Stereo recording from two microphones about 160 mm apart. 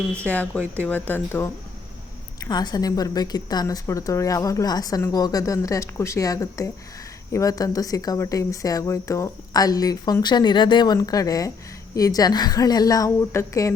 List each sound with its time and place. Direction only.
0.3 s speech: 10° left (ahead or behind)
2.4 s a woman's voice: 25° left (ahead or behind)